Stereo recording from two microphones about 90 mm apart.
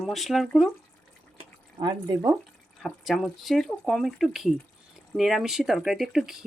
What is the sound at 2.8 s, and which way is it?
Speech, 5° left (ahead or behind).